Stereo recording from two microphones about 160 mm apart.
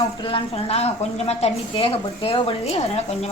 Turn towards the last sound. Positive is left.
turn(degrees=40)  # may be behind; listen again after turning